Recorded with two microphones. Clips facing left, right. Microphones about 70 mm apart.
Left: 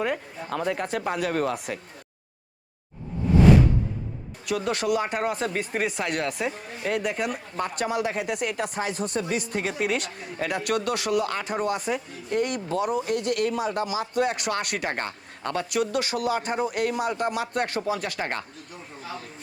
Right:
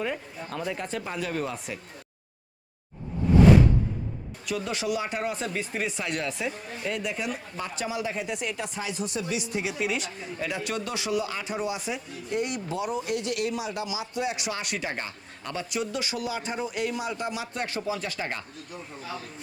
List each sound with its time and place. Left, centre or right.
0.5 s a man's voice: left
4.4 s a man's voice: left